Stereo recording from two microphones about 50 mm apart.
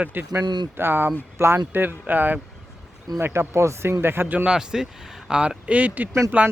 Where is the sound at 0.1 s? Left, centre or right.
Right.